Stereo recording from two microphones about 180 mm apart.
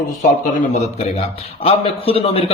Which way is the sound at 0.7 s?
40° left (ahead or behind).